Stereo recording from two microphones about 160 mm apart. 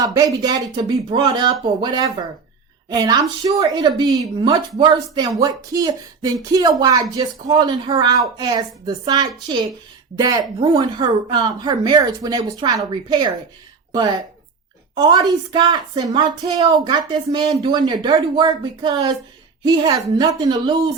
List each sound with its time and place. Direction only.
0.0 s a woman's voice: 20° right (ahead or behind)